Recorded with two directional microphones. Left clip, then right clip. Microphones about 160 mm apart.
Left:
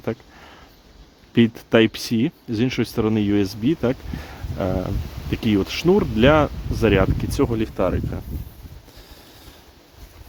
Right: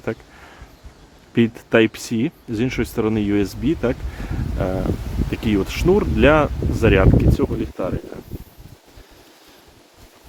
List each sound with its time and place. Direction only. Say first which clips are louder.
0.0 s a sound: right 1 dB; 20° left (ahead or behind)
1.3 s speech: even; 20° left (ahead or behind)
7.3 s speech: left 2 dB; 55° left (ahead or behind)